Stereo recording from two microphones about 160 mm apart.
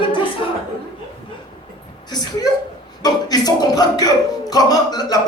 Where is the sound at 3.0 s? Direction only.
25° left (ahead or behind).